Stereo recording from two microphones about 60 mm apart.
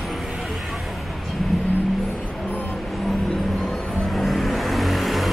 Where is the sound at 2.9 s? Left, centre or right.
Centre.